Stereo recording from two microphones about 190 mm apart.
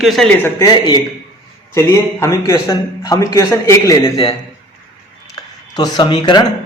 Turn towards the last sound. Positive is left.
turn(degrees=20)  # may be behind; listen again after turning